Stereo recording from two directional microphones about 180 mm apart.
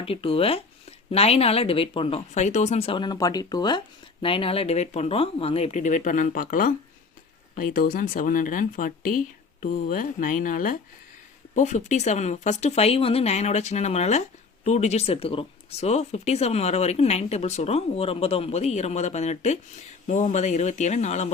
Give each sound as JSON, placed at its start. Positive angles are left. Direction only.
{"t": 0.0, "sound": "speech", "side_deg": 30}